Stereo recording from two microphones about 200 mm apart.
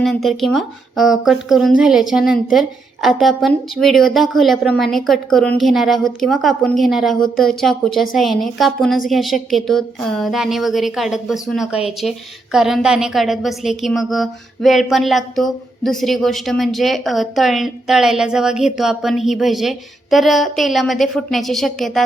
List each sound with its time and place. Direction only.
0.0 s a woman's voice: centre (ahead or behind)